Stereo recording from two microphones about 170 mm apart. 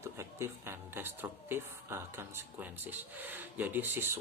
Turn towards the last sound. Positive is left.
turn(degrees=-15)  # may be behind; listen again after turning